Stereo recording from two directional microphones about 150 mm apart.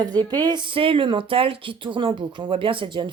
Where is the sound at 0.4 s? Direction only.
30° right (ahead or behind).